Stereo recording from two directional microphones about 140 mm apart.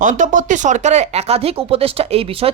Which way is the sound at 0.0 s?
65° right (ahead or behind).